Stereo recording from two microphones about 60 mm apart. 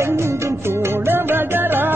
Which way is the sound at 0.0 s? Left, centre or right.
Right.